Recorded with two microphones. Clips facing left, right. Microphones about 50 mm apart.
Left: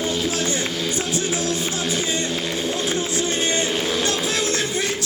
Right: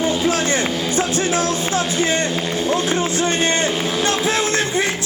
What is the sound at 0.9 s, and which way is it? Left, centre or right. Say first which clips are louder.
Music: right 5 dB; right.